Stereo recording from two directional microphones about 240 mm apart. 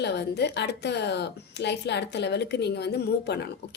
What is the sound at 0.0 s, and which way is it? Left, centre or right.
A woman's voice, left.